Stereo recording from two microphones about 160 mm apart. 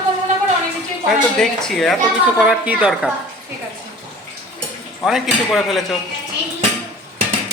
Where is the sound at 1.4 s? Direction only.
Centre (ahead or behind).